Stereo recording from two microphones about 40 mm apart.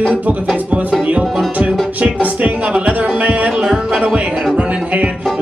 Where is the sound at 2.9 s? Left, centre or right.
Right.